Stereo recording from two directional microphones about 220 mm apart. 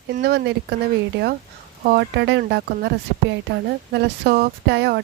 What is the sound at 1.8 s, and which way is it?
Speech, 45° right (ahead or behind).